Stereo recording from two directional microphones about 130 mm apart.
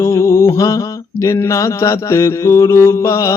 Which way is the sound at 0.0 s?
20° left (ahead or behind).